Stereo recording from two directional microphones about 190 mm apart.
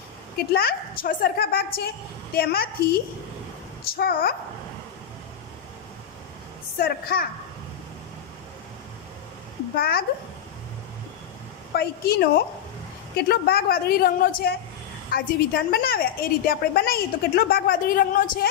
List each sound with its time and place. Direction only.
0.5 s a woman's voice: 50° left (ahead or behind)
3.9 s a woman's voice: 50° left (ahead or behind)
6.8 s a woman's voice: 50° left (ahead or behind)
9.8 s a woman's voice: 55° left (ahead or behind)
11.7 s a woman's voice: 55° left (ahead or behind)